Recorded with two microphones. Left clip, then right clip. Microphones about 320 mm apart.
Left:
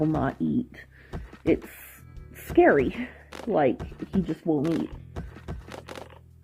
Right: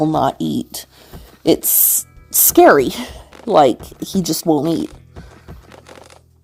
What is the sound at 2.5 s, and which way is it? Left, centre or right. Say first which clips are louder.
A woman's voice: right 10 dB; right.